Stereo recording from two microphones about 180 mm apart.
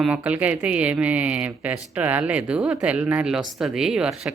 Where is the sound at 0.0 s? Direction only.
5° right (ahead or behind).